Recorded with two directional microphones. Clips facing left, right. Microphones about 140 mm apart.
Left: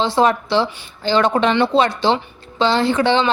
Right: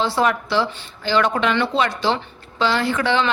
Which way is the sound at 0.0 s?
25° left (ahead or behind).